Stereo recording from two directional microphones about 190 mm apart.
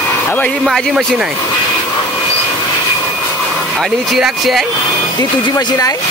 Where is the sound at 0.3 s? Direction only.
5° left (ahead or behind).